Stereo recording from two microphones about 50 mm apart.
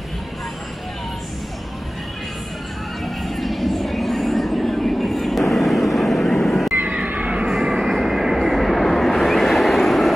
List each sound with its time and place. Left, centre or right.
3.2 s train: centre
7.1 s music: right
7.4 s vehicle: centre